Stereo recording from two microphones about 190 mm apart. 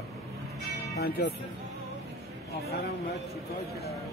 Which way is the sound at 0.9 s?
60° left (ahead or behind).